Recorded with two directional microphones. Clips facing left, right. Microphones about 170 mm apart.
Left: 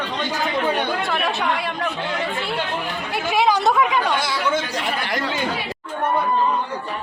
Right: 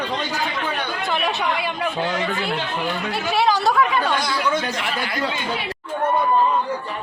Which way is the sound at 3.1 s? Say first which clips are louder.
Left 2 dB; 15° left (ahead or behind).